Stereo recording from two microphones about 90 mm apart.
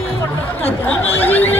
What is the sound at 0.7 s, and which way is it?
Speech, 20° left (ahead or behind).